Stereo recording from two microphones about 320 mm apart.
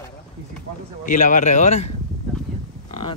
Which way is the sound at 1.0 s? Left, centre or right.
Left.